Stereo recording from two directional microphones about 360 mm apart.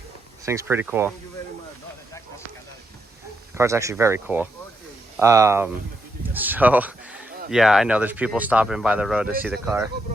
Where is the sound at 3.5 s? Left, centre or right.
Centre.